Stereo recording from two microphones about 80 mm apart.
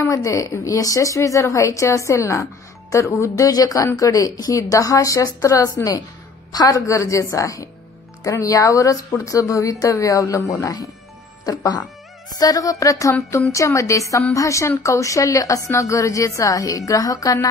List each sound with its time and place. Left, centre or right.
0.0 s a woman's voice: left
11.4 s a woman's voice: left